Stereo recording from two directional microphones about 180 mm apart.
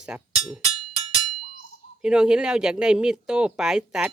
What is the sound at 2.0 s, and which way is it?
Speech, 5° right (ahead or behind).